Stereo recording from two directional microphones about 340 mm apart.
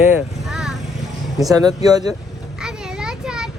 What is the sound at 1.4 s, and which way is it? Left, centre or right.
Speech, centre.